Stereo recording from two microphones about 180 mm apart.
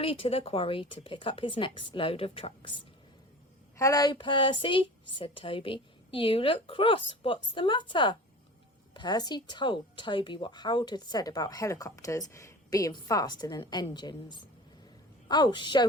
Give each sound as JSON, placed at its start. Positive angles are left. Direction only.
{"t": 0.0, "sound": "a woman's voice", "side_deg": 30}